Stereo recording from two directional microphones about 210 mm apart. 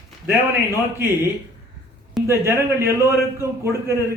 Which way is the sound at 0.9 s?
10° right (ahead or behind).